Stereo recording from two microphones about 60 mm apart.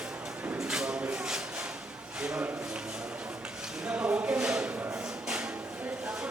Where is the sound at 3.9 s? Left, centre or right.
Right.